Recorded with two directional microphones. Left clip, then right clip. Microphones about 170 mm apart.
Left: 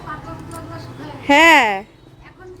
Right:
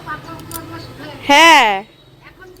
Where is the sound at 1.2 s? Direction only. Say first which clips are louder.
Right 3 dB; centre (ahead or behind).